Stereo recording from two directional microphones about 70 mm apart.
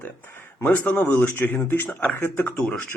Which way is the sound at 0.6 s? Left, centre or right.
Left.